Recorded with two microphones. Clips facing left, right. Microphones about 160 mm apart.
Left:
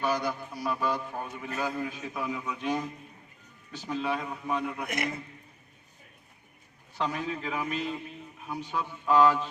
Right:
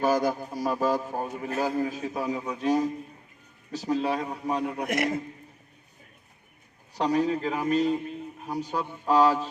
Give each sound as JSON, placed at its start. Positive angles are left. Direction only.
{"t": 0.0, "sound": "a man's voice", "side_deg": -45}
{"t": 6.9, "sound": "a man's voice", "side_deg": -35}